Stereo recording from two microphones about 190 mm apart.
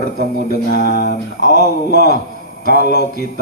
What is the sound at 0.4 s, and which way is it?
Speech, 55° left (ahead or behind).